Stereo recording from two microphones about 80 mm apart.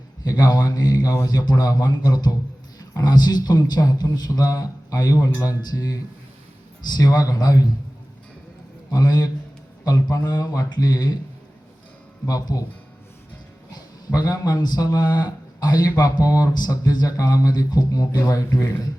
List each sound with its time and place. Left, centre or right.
0.3 s a man's voice: left
8.9 s a man's voice: left
12.3 s speech: left
13.7 s speech: left